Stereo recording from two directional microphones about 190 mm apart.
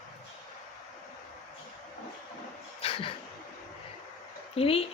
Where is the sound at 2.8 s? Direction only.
30° left (ahead or behind).